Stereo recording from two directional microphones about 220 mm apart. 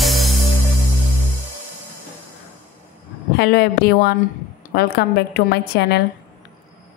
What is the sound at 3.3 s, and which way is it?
A woman's voice, 45° left (ahead or behind).